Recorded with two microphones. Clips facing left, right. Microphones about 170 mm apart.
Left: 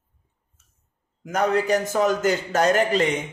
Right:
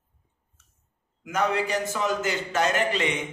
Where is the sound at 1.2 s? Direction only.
40° left (ahead or behind).